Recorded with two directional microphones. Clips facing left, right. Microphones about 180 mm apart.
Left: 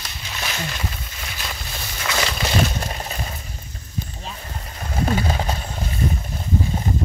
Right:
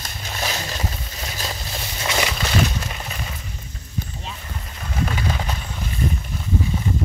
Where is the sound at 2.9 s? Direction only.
35° left (ahead or behind).